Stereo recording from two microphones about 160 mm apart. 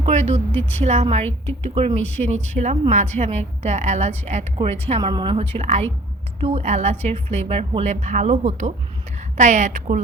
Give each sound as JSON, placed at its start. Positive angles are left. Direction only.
{"t": 0.0, "sound": "a sound", "side_deg": -45}
{"t": 0.8, "sound": "a woman's voice", "side_deg": -45}
{"t": 2.0, "sound": "speech", "side_deg": 10}
{"t": 2.2, "sound": "a woman's voice", "side_deg": -45}